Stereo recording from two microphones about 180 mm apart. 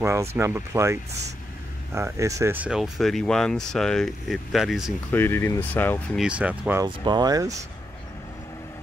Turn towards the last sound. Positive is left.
turn(degrees=-20)  # may be behind; listen again after turning